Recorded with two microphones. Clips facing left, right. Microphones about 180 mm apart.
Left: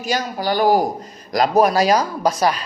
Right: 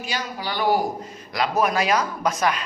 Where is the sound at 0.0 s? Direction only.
45° left (ahead or behind).